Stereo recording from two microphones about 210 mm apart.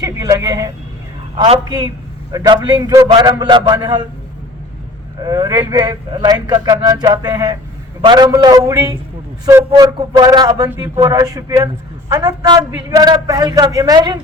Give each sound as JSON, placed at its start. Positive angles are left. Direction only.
{"t": 0.0, "sound": "vehicle", "side_deg": -15}
{"t": 1.4, "sound": "speech", "side_deg": -20}
{"t": 5.2, "sound": "speech", "side_deg": -20}